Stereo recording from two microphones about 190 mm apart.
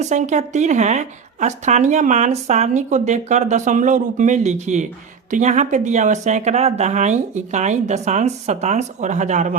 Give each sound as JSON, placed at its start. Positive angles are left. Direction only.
{"t": 0.0, "sound": "a woman's voice", "side_deg": -40}